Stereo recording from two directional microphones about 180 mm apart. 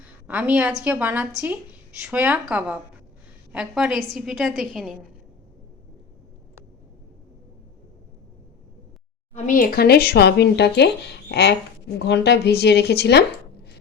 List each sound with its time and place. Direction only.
0.3 s a woman's voice: 10° right (ahead or behind)
9.3 s speech: 45° left (ahead or behind); by 13.2 s 65° left (ahead or behind)